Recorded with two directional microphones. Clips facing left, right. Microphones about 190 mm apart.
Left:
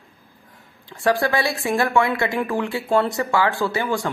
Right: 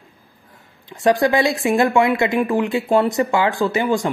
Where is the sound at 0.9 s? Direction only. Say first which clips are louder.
Right 4 dB; 20° right (ahead or behind).